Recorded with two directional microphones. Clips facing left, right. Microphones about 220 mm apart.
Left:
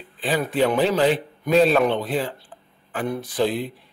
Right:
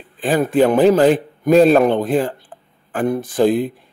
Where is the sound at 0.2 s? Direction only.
50° right (ahead or behind).